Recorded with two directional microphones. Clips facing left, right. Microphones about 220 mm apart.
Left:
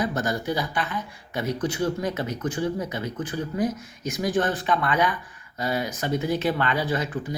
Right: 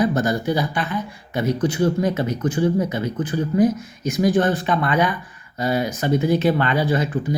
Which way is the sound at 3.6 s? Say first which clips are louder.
Right 9 dB; 25° right (ahead or behind).